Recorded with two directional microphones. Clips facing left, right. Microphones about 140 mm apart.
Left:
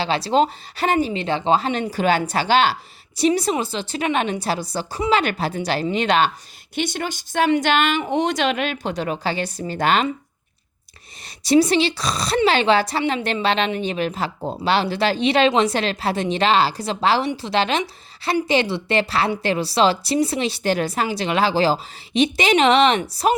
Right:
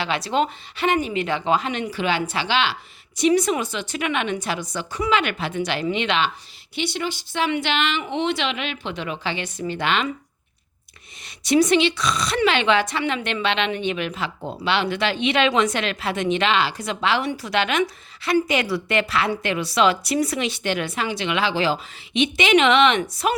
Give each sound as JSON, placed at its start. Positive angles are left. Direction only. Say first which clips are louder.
{"t": 0.0, "sound": "a woman's voice", "louder": "left 4 dB", "side_deg": 30}
{"t": 11.4, "sound": "a woman's voice", "louder": "left 1 dB", "side_deg": 35}